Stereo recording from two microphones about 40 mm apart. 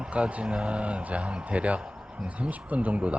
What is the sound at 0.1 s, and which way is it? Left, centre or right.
A man's voice, right.